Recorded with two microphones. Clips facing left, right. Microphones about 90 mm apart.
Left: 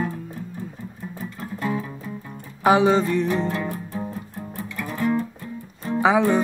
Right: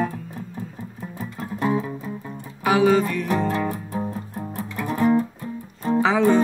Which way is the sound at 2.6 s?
25° left (ahead or behind).